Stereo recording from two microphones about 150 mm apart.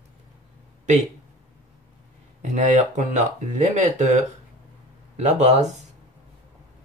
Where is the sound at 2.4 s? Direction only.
55° right (ahead or behind).